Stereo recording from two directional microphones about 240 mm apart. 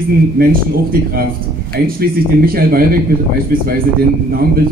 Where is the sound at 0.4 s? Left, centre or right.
Right.